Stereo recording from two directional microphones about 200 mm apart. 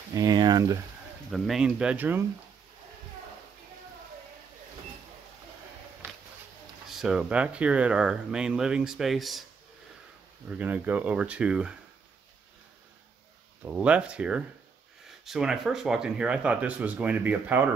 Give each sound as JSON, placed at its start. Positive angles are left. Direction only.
{"t": 0.1, "sound": "speech", "side_deg": -20}
{"t": 1.3, "sound": "speech", "side_deg": 0}
{"t": 6.9, "sound": "speech", "side_deg": -5}
{"t": 10.5, "sound": "speech", "side_deg": -10}
{"t": 13.7, "sound": "speech", "side_deg": -5}